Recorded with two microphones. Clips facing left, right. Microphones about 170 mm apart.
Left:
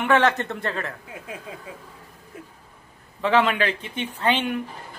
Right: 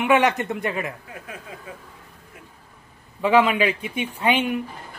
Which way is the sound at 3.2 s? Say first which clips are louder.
Right 3 dB; 10° right (ahead or behind).